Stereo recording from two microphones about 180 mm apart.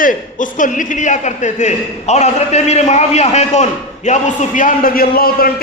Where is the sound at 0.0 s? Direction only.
45° left (ahead or behind).